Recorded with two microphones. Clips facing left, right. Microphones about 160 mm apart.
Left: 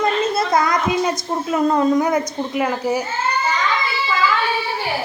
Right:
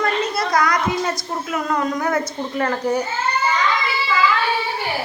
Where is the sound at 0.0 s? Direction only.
25° left (ahead or behind).